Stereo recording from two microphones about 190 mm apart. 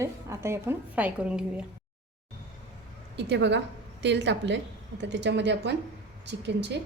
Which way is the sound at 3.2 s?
65° right (ahead or behind).